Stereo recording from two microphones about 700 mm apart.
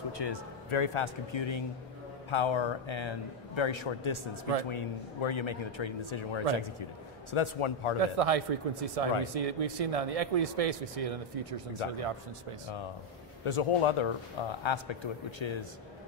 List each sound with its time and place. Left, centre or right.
0.2 s a man's voice: left
8.0 s speech: right
13.5 s a man's voice: left